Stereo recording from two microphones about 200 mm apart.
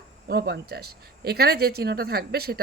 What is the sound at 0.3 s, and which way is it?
Speech, 55° right (ahead or behind).